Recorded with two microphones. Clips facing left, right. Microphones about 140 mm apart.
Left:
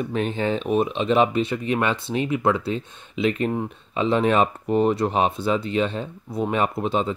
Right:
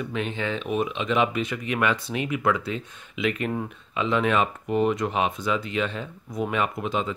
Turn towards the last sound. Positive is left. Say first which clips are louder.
# left 4 dB
turn(degrees=30)  # may be behind; listen again after turning